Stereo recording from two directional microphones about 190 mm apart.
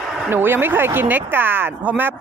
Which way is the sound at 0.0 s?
Centre (ahead or behind).